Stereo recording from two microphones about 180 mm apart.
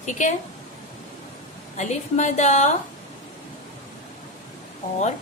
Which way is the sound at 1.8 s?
40° left (ahead or behind).